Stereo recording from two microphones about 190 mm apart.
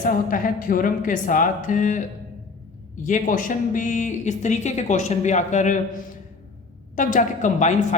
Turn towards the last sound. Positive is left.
turn(degrees=40)  # may be behind; listen again after turning